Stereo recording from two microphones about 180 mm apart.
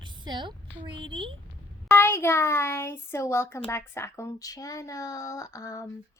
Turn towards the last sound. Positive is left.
turn(degrees=20)  # may be behind; listen again after turning